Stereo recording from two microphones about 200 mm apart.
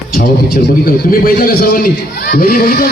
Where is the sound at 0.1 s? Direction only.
45° left (ahead or behind).